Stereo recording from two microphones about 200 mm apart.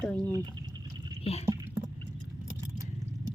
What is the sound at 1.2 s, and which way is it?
Speech, 30° left (ahead or behind).